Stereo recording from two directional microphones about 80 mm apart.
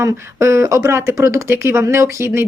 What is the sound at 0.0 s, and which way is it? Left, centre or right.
Speech, right.